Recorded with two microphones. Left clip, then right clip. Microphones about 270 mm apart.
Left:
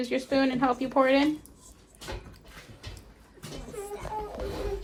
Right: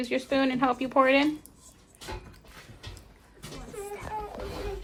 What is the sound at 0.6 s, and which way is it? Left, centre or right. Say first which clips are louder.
Speech: right 1 dB; right.